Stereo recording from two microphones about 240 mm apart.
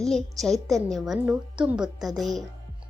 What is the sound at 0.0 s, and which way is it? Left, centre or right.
A woman's voice, centre.